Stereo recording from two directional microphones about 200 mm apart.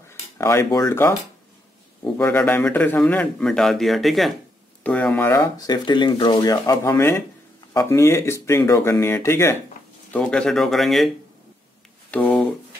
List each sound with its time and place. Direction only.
0.1 s speech: 15° left (ahead or behind)
2.1 s a man's voice: 10° left (ahead or behind)
12.1 s a sound: 5° left (ahead or behind)